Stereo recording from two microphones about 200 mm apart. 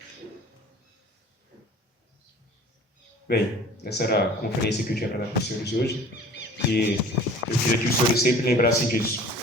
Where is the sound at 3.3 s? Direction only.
55° left (ahead or behind).